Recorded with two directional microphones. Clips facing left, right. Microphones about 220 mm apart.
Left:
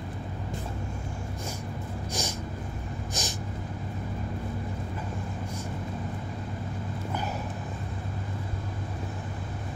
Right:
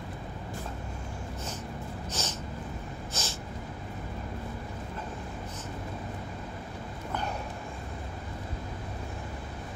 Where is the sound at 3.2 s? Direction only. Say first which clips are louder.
Left 2 dB; 15° left (ahead or behind).